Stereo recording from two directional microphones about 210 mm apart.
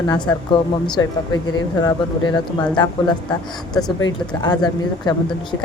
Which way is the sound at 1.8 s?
20° left (ahead or behind).